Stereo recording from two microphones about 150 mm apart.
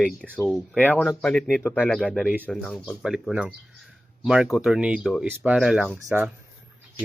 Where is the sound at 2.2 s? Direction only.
10° right (ahead or behind).